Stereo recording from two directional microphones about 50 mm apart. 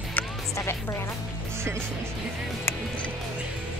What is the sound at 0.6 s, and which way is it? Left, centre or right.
Speech, left.